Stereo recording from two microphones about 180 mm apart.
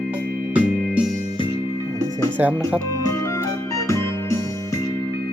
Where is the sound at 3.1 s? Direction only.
15° left (ahead or behind).